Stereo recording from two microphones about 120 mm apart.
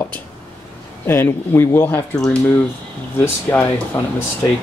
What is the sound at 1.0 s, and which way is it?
Speech, 20° left (ahead or behind).